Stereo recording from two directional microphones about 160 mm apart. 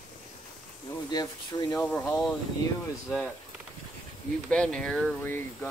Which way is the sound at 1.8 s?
Centre (ahead or behind).